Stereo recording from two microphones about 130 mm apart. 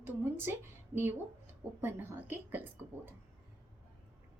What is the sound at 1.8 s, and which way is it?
A woman's voice, 15° right (ahead or behind).